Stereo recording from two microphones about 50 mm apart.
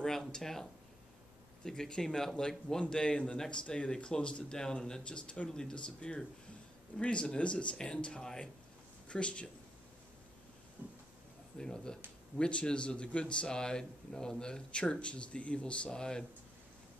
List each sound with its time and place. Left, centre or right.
0.3 s speech: centre
10.8 s a sound: right
11.5 s speech: centre